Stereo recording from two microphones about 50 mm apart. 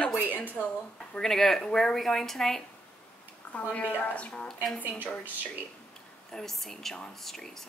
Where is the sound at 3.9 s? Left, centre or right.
Left.